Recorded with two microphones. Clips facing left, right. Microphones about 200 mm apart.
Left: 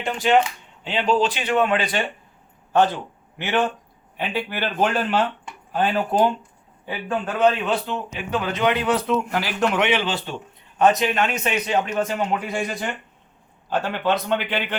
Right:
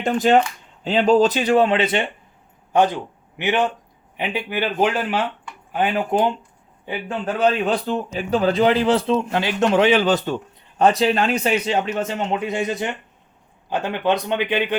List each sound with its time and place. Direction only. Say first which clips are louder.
0.0 s a man's voice: right 3 dB; 45° right (ahead or behind); by 6.3 s 15° right (ahead or behind)
7.4 s a man's voice: right 1 dB; 35° right (ahead or behind)
10.8 s a man's voice: right 2 dB; 30° right (ahead or behind); by 14.8 s 15° right (ahead or behind)